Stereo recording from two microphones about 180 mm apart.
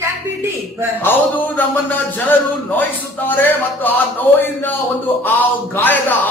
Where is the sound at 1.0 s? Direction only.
10° left (ahead or behind).